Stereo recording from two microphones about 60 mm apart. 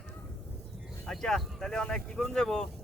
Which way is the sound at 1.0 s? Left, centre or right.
Centre.